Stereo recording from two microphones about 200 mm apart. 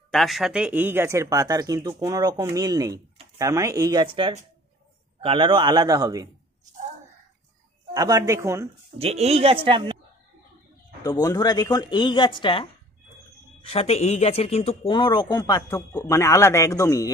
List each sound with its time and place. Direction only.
0.1 s a man's voice: centre (ahead or behind); by 6.2 s 20° right (ahead or behind)
7.9 s speech: 15° right (ahead or behind)
8.9 s a man's voice: 30° right (ahead or behind)
11.0 s speech: 20° left (ahead or behind)